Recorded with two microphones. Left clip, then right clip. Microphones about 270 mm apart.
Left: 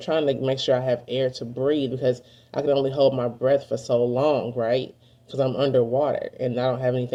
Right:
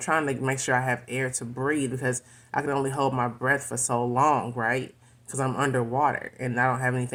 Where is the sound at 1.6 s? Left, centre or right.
Centre.